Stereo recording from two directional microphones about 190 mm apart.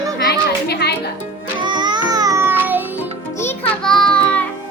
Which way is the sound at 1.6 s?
25° right (ahead or behind).